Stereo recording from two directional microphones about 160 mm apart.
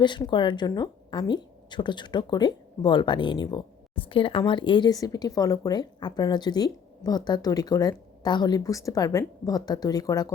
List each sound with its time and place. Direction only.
0.0 s a woman's voice: 30° left (ahead or behind)